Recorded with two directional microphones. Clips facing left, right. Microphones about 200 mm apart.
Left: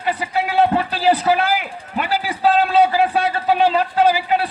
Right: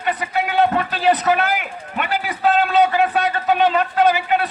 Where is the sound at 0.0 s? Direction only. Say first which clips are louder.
Left 1 dB; 30° left (ahead or behind).